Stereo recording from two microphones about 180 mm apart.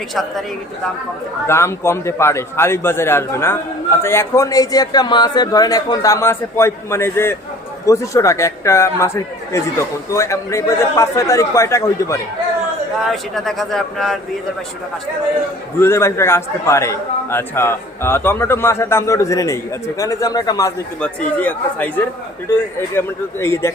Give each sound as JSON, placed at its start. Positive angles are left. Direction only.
{"t": 0.1, "sound": "speech", "side_deg": 0}
{"t": 1.5, "sound": "a man's voice", "side_deg": 15}
{"t": 13.1, "sound": "speech", "side_deg": 0}
{"t": 15.8, "sound": "a man's voice", "side_deg": 15}
{"t": 21.0, "sound": "a man's voice", "side_deg": 10}